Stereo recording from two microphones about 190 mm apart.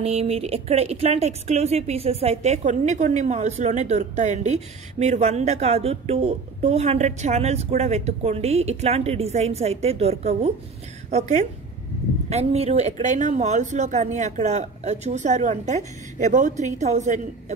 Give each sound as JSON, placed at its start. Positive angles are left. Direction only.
{"t": 0.0, "sound": "a woman's voice", "side_deg": -30}